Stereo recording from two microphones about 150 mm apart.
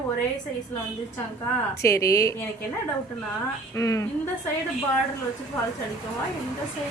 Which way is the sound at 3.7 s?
20° left (ahead or behind).